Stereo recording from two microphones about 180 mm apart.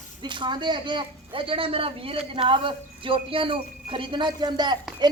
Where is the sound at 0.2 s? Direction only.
25° right (ahead or behind).